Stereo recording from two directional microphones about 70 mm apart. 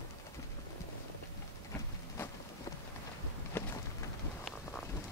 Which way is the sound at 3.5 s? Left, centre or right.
Left.